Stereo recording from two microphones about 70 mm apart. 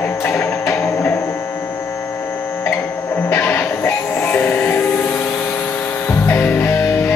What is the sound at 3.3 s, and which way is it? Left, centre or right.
Music, left.